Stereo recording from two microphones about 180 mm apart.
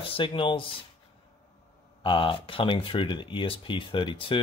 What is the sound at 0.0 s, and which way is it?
Speech, 30° left (ahead or behind).